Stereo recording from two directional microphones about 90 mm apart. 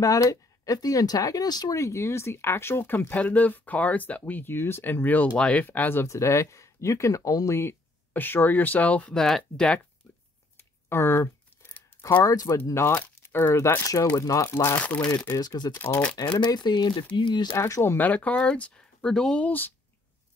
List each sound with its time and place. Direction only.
0.0 s speech: 40° left (ahead or behind)
1.8 s speech: 35° left (ahead or behind)
8.1 s speech: 20° left (ahead or behind)
9.1 s speech: 5° left (ahead or behind)
10.0 s a sound: 25° left (ahead or behind)
12.0 s speech: 30° left (ahead or behind)
13.7 s speech: 35° left (ahead or behind)
14.5 s speech: 30° left (ahead or behind)
14.8 s speech: 15° left (ahead or behind)
15.3 s speech: 50° left (ahead or behind)
15.7 s speech: 25° left (ahead or behind)
16.2 s speech: 55° left (ahead or behind)
17.6 s speech: 35° left (ahead or behind)
17.9 s speech: 15° left (ahead or behind)